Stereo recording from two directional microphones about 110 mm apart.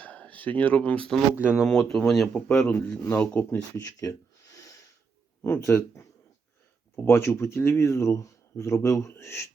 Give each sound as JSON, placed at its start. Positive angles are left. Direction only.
{"t": 0.0, "sound": "speech", "side_deg": 15}
{"t": 1.4, "sound": "speech", "side_deg": -10}
{"t": 1.6, "sound": "speech", "side_deg": 5}
{"t": 3.8, "sound": "speech", "side_deg": 30}
{"t": 5.4, "sound": "speech", "side_deg": 25}